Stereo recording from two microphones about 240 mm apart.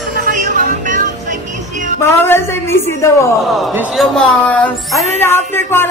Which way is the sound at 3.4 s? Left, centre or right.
Centre.